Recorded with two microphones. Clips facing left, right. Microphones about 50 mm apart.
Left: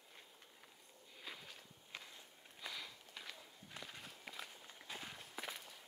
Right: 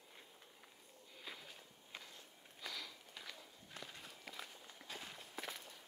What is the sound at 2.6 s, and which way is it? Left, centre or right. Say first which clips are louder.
Walk: even; centre.